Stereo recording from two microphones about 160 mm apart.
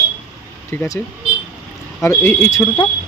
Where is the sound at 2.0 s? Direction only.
15° left (ahead or behind).